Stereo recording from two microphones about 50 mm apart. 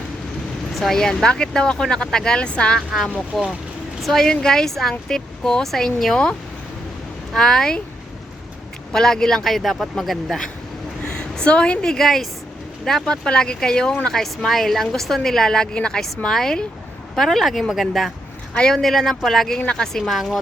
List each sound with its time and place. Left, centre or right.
0.7 s vehicle: centre
0.9 s a woman's voice: centre
3.3 s a woman's voice: centre
7.3 s a woman's voice: centre
8.9 s a woman's voice: centre
11.0 s a sound: centre
11.9 s a woman's voice: centre
18.5 s a woman's voice: centre
18.8 s speech: centre